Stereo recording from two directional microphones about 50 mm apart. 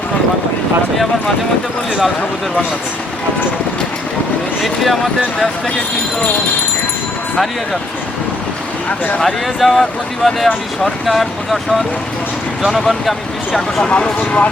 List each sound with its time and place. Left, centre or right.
4.6 s speech: centre
9.2 s speech: centre
12.6 s speech: centre
13.8 s speech: centre